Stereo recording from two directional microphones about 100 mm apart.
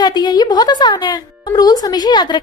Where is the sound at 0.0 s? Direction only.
45° left (ahead or behind).